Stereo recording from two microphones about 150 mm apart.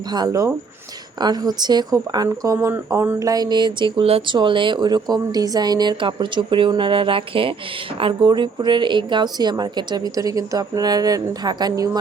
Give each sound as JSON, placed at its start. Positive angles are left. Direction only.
{"t": 0.1, "sound": "speech", "side_deg": -25}